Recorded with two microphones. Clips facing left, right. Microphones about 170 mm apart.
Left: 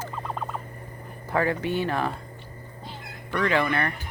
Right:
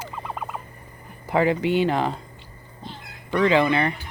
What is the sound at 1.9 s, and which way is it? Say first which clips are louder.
Speech: right 4 dB; 20° right (ahead or behind).